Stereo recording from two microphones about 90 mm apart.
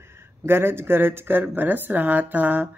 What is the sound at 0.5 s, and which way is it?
Speech, 25° right (ahead or behind).